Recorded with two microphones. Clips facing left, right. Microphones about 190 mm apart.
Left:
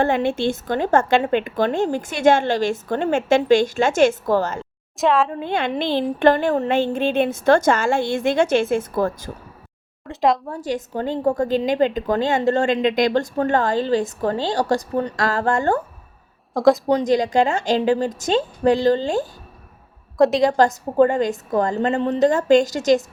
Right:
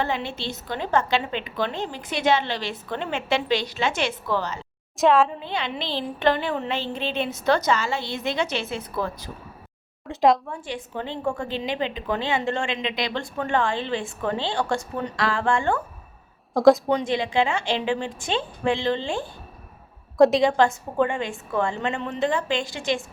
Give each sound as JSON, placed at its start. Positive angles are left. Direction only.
{"t": 0.0, "sound": "a woman's voice", "side_deg": 50}
{"t": 4.9, "sound": "a woman's voice", "side_deg": 0}
{"t": 5.4, "sound": "a woman's voice", "side_deg": 50}
{"t": 10.1, "sound": "a woman's voice", "side_deg": 0}
{"t": 10.5, "sound": "a woman's voice", "side_deg": 40}
{"t": 16.6, "sound": "a woman's voice", "side_deg": 0}
{"t": 16.9, "sound": "a woman's voice", "side_deg": 40}
{"t": 20.1, "sound": "a woman's voice", "side_deg": 0}
{"t": 20.5, "sound": "a woman's voice", "side_deg": 40}